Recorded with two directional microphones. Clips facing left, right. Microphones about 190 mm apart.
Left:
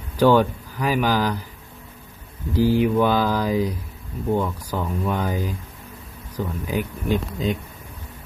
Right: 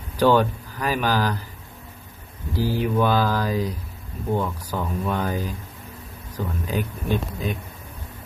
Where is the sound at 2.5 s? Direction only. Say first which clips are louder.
Left 5 dB; 15° left (ahead or behind).